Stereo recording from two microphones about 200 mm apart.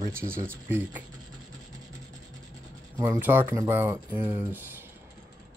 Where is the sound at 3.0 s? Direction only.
10° right (ahead or behind).